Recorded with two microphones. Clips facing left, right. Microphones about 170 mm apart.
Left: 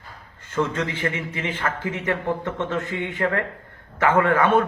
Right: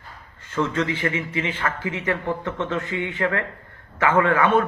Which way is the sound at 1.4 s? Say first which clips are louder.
Right 1 dB; 15° right (ahead or behind).